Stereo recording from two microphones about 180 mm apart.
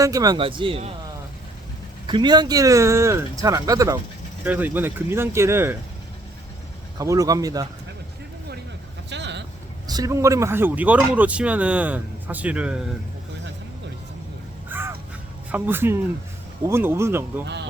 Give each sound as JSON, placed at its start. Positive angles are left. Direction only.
{"t": 0.0, "sound": "speech", "side_deg": -20}
{"t": 2.0, "sound": "speech", "side_deg": -25}
{"t": 7.0, "sound": "speech", "side_deg": -20}
{"t": 9.0, "sound": "vehicle", "side_deg": -75}
{"t": 9.8, "sound": "speech", "side_deg": -20}
{"t": 14.7, "sound": "crow", "side_deg": -10}
{"t": 15.5, "sound": "speech", "side_deg": -10}